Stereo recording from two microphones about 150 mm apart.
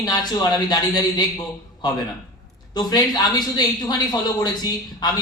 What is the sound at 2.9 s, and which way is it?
A man's voice, 25° left (ahead or behind).